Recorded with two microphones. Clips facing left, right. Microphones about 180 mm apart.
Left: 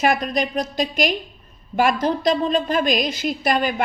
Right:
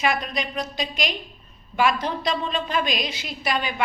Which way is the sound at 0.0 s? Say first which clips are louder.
Left 5 dB; 45° left (ahead or behind).